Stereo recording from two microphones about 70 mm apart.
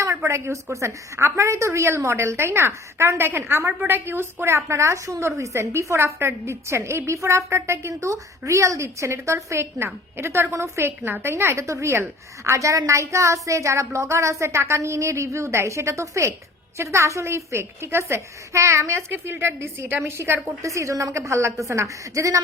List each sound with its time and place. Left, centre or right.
0.2 s a woman's voice: right
20.7 s a woman's voice: right